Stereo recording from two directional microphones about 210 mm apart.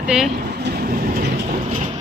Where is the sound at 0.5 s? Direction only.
50° right (ahead or behind).